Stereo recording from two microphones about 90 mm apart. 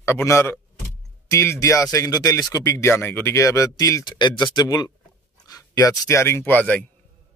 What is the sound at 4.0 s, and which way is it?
Speech, 55° left (ahead or behind).